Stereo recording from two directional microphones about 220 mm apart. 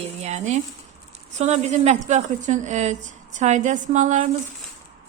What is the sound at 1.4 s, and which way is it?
Speech, 30° right (ahead or behind).